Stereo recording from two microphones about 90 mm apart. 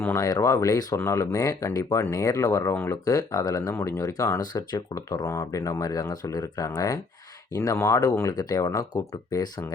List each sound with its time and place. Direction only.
0.1 s speech: 45° left (ahead or behind)
8.4 s speech: 45° left (ahead or behind)